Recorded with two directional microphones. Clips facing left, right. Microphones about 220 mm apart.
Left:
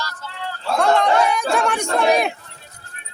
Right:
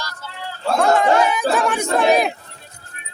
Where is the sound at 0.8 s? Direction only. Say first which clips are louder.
Right 1 dB; 5° right (ahead or behind).